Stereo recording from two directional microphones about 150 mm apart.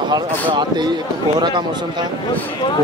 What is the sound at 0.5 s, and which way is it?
Speech, 30° right (ahead or behind).